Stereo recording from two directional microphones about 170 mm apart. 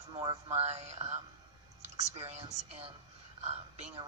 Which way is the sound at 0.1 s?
30° right (ahead or behind).